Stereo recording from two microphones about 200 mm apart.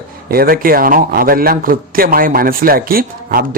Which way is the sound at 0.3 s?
45° right (ahead or behind).